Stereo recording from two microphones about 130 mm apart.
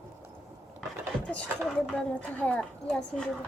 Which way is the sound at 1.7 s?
5° left (ahead or behind).